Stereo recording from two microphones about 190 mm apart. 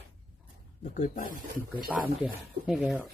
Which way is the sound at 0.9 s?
45° left (ahead or behind).